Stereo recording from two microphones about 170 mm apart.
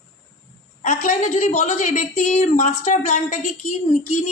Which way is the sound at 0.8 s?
45° left (ahead or behind).